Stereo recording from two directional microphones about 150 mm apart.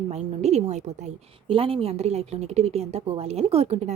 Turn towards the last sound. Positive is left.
turn(degrees=-45)  # may be behind; listen again after turning